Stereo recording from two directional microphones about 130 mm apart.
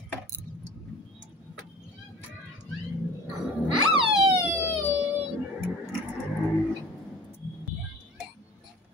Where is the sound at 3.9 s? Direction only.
45° right (ahead or behind).